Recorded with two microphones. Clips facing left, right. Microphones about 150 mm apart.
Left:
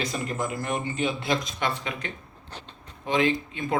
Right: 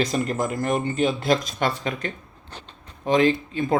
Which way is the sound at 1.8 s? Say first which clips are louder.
Right 5 dB; 40° right (ahead or behind).